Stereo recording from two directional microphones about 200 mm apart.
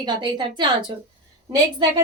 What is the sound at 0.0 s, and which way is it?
A woman's voice, 20° right (ahead or behind).